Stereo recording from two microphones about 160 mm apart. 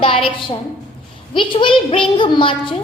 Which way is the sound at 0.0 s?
35° left (ahead or behind).